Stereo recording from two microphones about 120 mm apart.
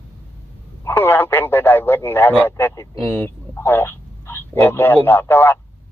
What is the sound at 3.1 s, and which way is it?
Speech, 15° left (ahead or behind).